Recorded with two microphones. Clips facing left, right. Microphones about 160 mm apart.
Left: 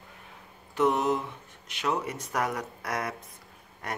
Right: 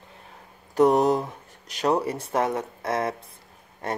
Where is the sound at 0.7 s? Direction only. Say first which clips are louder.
Right 6 dB; 40° right (ahead or behind).